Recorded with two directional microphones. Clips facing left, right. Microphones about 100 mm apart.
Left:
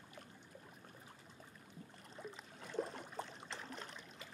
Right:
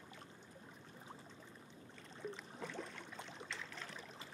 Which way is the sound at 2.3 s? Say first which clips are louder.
Left 3 dB; 40° left (ahead or behind).